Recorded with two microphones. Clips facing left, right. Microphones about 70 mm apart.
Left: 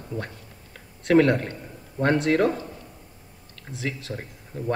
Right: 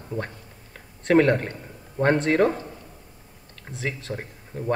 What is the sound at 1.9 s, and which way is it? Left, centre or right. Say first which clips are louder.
Speech: right 1 dB; centre.